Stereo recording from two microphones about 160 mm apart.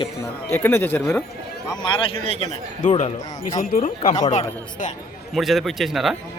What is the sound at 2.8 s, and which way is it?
Speech, 45° left (ahead or behind).